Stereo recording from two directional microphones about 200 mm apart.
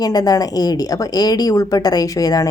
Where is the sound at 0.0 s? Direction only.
20° left (ahead or behind).